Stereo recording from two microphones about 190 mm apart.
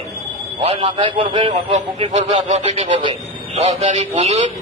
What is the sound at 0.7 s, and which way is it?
A man's voice, 30° right (ahead or behind).